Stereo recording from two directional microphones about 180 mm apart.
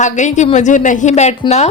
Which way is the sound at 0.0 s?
40° left (ahead or behind).